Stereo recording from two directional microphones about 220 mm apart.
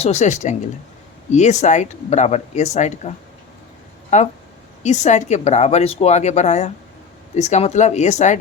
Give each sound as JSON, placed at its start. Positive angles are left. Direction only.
{"t": 0.0, "sound": "speech", "side_deg": 30}
{"t": 4.1, "sound": "speech", "side_deg": 30}